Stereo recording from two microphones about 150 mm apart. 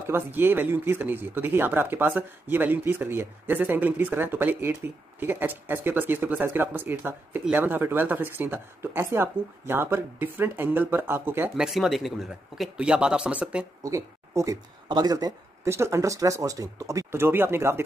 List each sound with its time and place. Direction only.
0.0 s speech: 15° right (ahead or behind)
13.8 s speech: 20° right (ahead or behind)